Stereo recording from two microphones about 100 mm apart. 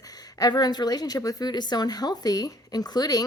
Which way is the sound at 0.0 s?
40° left (ahead or behind).